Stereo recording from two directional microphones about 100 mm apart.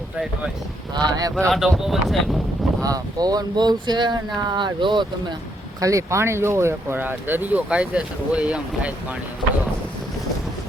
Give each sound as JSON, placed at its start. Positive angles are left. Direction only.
{"t": 0.9, "sound": "speech", "side_deg": -45}
{"t": 1.4, "sound": "speech", "side_deg": 0}
{"t": 2.8, "sound": "speech", "side_deg": -40}
{"t": 5.8, "sound": "speech", "side_deg": -30}